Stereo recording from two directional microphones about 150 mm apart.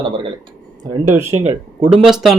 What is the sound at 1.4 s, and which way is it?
Speech, 45° right (ahead or behind).